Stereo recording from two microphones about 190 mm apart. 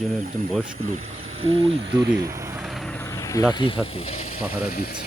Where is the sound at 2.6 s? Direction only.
Centre (ahead or behind); by 4.4 s 40° left (ahead or behind).